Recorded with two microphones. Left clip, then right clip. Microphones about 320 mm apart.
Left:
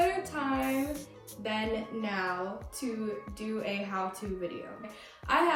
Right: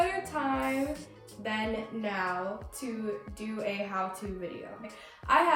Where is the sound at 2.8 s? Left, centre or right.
Centre.